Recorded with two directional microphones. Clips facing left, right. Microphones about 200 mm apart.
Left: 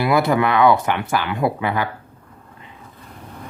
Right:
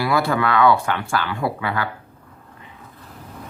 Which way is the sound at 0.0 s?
20° left (ahead or behind).